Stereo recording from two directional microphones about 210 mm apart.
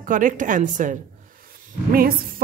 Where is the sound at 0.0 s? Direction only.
40° right (ahead or behind).